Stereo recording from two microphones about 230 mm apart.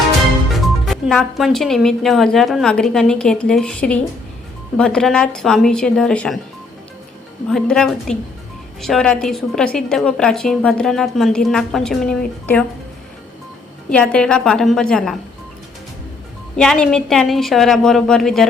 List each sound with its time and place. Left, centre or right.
0.9 s a woman's voice: centre
7.5 s a woman's voice: centre
13.9 s a woman's voice: centre
16.6 s a woman's voice: centre